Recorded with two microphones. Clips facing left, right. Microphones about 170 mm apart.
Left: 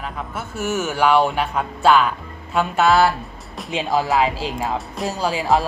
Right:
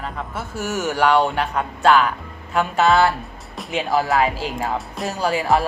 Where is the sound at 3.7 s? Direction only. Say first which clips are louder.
Even; 20° left (ahead or behind).